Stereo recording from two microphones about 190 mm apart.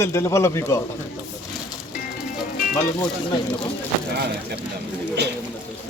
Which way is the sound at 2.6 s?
45° left (ahead or behind).